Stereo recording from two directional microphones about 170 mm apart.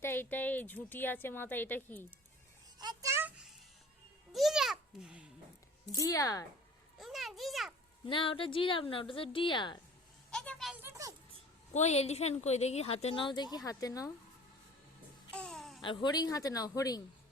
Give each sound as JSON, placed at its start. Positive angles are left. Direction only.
{"t": 0.0, "sound": "a woman's voice", "side_deg": 10}
{"t": 2.7, "sound": "a sound", "side_deg": -20}
{"t": 5.9, "sound": "speech", "side_deg": 20}
{"t": 7.0, "sound": "a child's voice", "side_deg": 0}
{"t": 8.0, "sound": "a woman's voice", "side_deg": 30}
{"t": 10.3, "sound": "a child's voice", "side_deg": 5}
{"t": 10.8, "sound": "a child's voice", "side_deg": -15}
{"t": 11.7, "sound": "a woman's voice", "side_deg": 40}
{"t": 15.4, "sound": "a sound", "side_deg": 0}
{"t": 15.8, "sound": "speech", "side_deg": 30}